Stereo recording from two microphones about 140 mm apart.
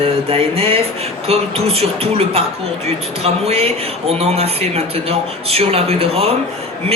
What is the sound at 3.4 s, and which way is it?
Speech, 45° right (ahead or behind).